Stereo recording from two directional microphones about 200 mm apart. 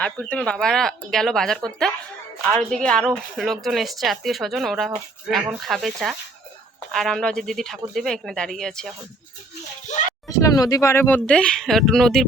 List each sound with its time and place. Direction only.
0.0 s a woman's voice: 5° left (ahead or behind)
9.9 s a sound: 35° left (ahead or behind)
10.2 s speech: 15° left (ahead or behind)